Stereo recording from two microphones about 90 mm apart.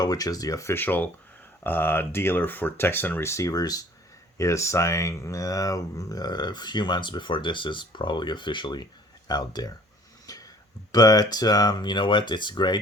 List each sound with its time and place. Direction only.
0.0 s speech: 45° left (ahead or behind)
0.7 s speech: 20° left (ahead or behind); by 9.7 s 45° left (ahead or behind)
10.2 s a sound: 40° left (ahead or behind)
10.9 s speech: 45° left (ahead or behind)